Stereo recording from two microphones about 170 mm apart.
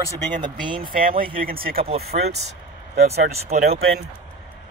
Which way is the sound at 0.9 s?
55° right (ahead or behind).